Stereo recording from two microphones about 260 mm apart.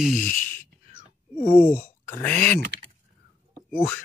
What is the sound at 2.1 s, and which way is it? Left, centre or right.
Speech, centre.